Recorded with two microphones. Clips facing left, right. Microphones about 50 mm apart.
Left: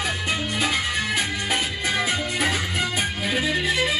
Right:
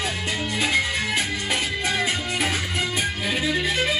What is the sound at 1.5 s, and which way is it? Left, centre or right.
Music, left.